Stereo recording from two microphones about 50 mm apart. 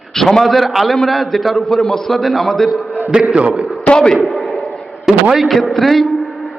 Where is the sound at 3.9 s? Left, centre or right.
Centre.